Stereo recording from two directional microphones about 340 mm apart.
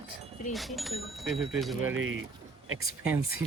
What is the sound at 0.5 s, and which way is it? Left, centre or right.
Speech, centre.